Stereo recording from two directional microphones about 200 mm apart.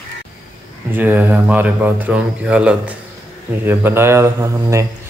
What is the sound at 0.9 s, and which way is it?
Speech, 10° right (ahead or behind).